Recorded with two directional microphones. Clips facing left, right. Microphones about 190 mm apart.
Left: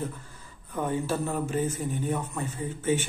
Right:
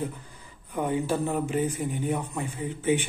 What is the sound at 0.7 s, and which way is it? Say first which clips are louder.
Speech: right 2 dB; 15° right (ahead or behind).